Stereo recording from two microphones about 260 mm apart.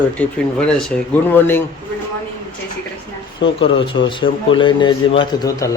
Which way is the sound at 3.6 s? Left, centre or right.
Centre.